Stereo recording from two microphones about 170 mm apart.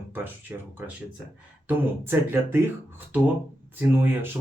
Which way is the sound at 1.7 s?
10° right (ahead or behind).